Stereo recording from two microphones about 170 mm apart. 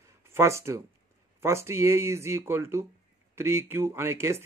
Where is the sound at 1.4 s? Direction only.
15° right (ahead or behind).